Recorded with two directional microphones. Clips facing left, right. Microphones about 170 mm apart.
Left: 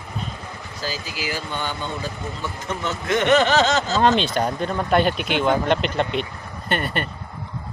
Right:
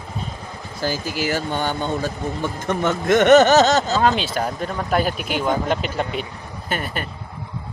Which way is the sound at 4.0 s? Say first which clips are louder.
Left 1 dB; 5° right (ahead or behind).